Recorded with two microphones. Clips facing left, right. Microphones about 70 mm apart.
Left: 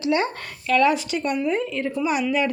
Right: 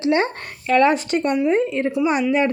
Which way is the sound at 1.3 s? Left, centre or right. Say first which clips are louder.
Right 6 dB; right.